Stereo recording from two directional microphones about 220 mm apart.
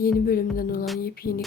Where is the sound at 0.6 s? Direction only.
40° left (ahead or behind).